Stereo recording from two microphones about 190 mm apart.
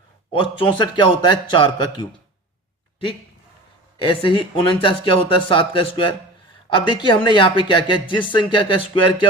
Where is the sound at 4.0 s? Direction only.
25° left (ahead or behind).